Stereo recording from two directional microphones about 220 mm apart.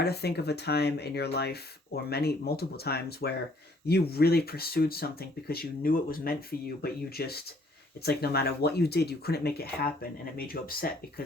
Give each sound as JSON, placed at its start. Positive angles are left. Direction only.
{"t": 0.0, "sound": "speech", "side_deg": 45}